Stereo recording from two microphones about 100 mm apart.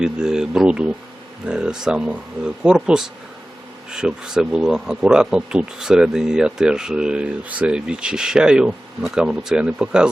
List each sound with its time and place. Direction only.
0.0 s speech: 5° right (ahead or behind)